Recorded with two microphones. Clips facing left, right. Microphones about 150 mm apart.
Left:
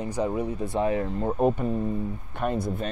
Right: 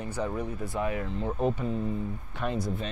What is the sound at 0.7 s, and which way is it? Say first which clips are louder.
Speech: left 6 dB; 30° left (ahead or behind).